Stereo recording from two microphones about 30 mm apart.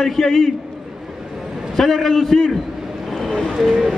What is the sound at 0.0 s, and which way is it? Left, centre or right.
Speech, centre.